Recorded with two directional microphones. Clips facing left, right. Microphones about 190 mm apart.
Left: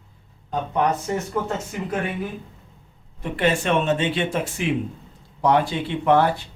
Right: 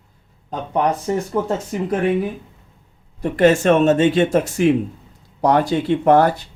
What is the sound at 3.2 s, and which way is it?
Speech, 45° right (ahead or behind).